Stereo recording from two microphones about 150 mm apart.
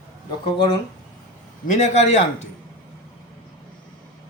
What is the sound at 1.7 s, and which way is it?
Speech, 55° left (ahead or behind).